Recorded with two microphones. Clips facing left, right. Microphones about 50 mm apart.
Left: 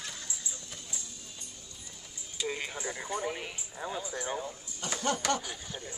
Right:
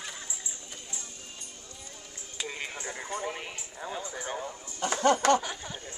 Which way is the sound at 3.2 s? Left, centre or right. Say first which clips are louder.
Even; centre.